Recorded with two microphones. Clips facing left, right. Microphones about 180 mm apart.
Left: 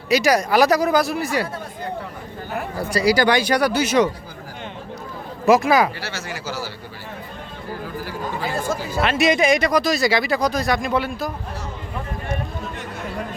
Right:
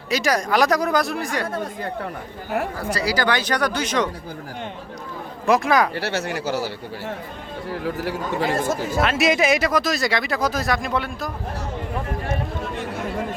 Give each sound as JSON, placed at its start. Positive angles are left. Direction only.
{"t": 0.1, "sound": "speech", "side_deg": 10}
{"t": 2.9, "sound": "speech", "side_deg": 15}
{"t": 5.5, "sound": "speech", "side_deg": 5}
{"t": 5.9, "sound": "speech", "side_deg": -65}
{"t": 7.7, "sound": "a man's voice", "side_deg": -70}
{"t": 9.0, "sound": "speech", "side_deg": 0}